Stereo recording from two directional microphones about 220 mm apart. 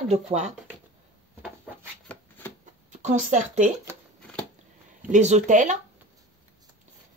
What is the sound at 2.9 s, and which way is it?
Speech, 35° right (ahead or behind).